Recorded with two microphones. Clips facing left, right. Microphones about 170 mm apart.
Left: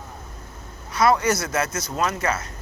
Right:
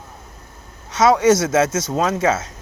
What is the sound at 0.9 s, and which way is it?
Speech, 90° right.